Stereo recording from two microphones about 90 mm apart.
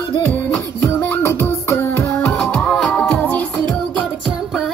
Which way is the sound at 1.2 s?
30° left (ahead or behind).